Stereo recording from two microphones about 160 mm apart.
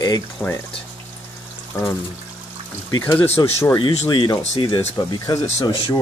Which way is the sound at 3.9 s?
30° left (ahead or behind).